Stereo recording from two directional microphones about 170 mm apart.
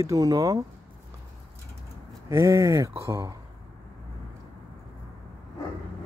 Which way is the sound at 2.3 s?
15° right (ahead or behind).